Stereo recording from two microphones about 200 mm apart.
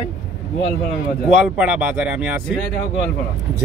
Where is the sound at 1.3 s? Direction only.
5° right (ahead or behind).